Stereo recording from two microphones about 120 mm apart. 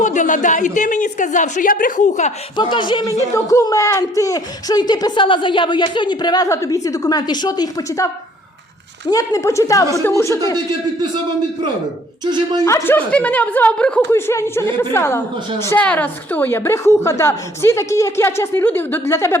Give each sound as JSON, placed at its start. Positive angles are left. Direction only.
{"t": 0.0, "sound": "a woman's voice", "side_deg": 90}
{"t": 2.6, "sound": "speech", "side_deg": 40}
{"t": 3.1, "sound": "a woman's voice", "side_deg": 25}
{"t": 12.2, "sound": "speech", "side_deg": -35}
{"t": 12.6, "sound": "a woman's voice", "side_deg": 25}
{"t": 13.1, "sound": "a woman's voice", "side_deg": 10}
{"t": 14.1, "sound": "a woman's voice", "side_deg": 20}